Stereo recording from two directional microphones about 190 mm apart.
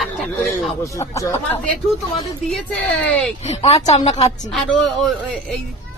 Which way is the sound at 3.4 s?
35° left (ahead or behind).